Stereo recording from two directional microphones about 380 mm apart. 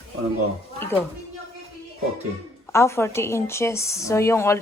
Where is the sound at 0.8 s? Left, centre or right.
Centre.